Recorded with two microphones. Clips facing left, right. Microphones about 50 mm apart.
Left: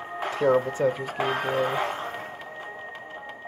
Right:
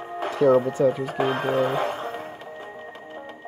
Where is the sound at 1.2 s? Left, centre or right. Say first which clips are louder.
Right 2 dB; centre.